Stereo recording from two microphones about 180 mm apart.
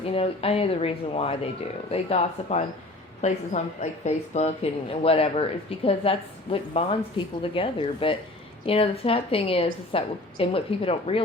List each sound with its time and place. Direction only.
0.0 s a woman's voice: 35° left (ahead or behind)